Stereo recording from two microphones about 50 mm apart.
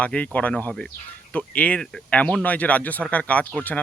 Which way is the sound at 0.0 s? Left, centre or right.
Left.